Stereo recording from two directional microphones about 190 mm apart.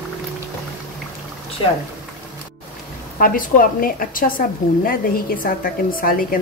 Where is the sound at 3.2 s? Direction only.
45° left (ahead or behind).